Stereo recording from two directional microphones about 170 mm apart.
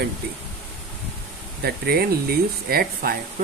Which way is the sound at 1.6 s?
65° right (ahead or behind).